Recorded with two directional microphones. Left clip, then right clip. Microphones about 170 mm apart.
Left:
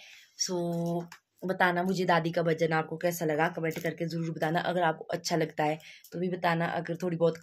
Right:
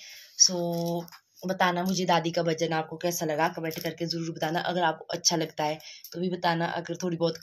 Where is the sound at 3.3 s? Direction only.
20° left (ahead or behind).